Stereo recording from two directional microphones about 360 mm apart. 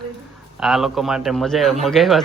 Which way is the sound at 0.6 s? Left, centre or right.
Centre.